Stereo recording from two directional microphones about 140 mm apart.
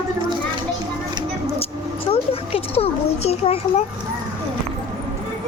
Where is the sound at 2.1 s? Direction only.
45° left (ahead or behind).